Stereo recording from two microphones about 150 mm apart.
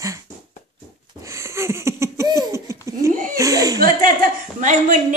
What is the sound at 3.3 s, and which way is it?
Speech, 20° right (ahead or behind).